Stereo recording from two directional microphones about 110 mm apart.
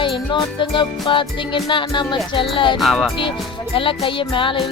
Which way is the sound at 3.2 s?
50° left (ahead or behind).